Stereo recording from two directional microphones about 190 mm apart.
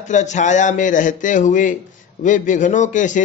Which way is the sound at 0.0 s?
40° left (ahead or behind).